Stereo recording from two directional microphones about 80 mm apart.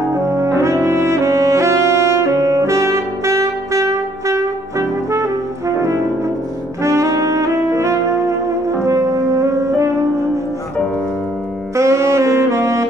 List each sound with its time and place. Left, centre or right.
0.4 s brass instrument: right
4.3 s music: right
6.8 s brass instrument: right
8.8 s music: right
11.7 s saxophone: right